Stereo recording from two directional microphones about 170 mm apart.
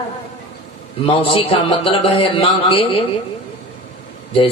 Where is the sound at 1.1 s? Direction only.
30° left (ahead or behind).